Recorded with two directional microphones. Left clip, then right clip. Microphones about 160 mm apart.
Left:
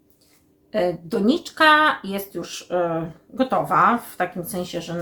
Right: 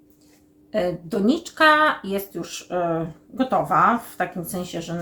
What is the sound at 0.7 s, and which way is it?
Speech, 20° left (ahead or behind).